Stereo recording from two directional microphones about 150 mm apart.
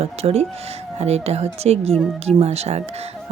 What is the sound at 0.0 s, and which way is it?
A woman's voice, 45° right (ahead or behind).